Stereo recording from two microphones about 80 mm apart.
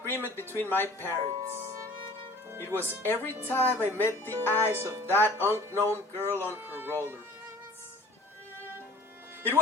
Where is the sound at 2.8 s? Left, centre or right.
Right.